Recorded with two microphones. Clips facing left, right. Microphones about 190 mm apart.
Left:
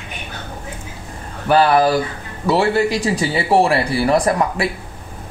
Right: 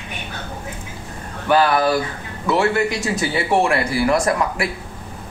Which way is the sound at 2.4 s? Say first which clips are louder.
Left 2 dB; 35° left (ahead or behind).